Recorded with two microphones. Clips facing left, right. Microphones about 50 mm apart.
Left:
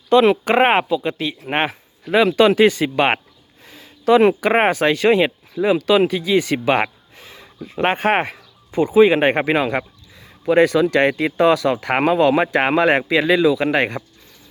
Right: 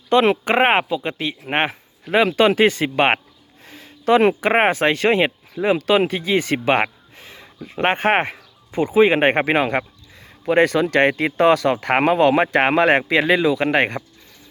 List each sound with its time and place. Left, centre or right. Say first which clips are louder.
0.1 s speech: left 2 dB; right